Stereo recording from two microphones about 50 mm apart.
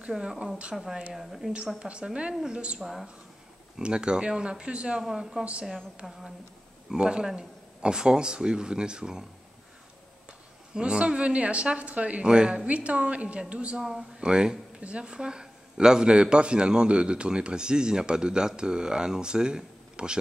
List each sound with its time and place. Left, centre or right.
0.1 s speech: centre
1.8 s a woman's voice: centre
2.8 s speech: centre
3.7 s a woman's voice: centre
5.4 s a woman's voice: right
6.0 s speech: centre
6.9 s speech: centre
10.7 s a woman's voice: centre
12.3 s speech: centre
12.6 s a woman's voice: right
13.7 s speech: centre